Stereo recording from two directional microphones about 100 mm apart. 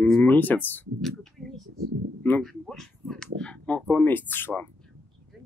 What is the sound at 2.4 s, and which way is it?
Speech, 5° left (ahead or behind).